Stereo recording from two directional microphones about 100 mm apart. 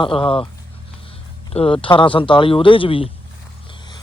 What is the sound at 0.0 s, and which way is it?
Speech, 65° left (ahead or behind).